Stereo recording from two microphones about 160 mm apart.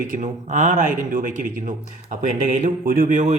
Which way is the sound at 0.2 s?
50° right (ahead or behind).